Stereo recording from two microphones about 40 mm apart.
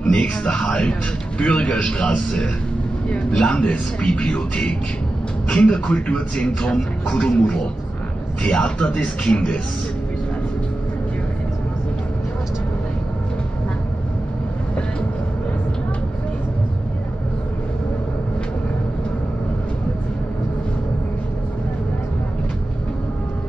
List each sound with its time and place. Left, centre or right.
0.0 s a man's voice: left
4.1 s a man's voice: left